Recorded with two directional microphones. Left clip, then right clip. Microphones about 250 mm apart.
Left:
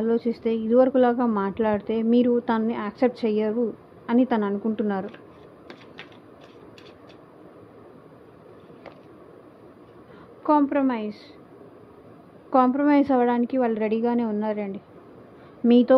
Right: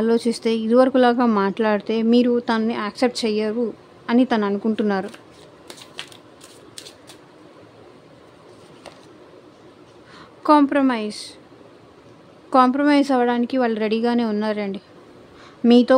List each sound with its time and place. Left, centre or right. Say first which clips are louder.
0.0 s a woman's voice: right 4 dB; right
10.4 s speech: right 5 dB; right
12.4 s speech: right 4 dB; centre